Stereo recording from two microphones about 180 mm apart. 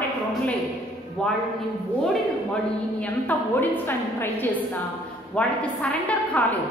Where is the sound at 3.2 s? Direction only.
10° left (ahead or behind).